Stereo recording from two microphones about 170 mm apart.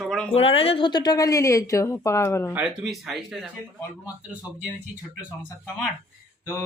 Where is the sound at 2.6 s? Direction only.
5° right (ahead or behind).